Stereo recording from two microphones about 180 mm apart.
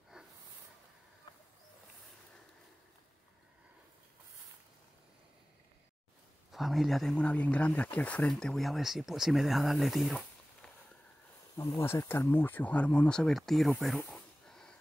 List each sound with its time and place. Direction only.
1.3 s a sound: 25° left (ahead or behind)
6.5 s speech: centre (ahead or behind)
11.5 s speech: 20° left (ahead or behind); by 14.8 s 5° left (ahead or behind)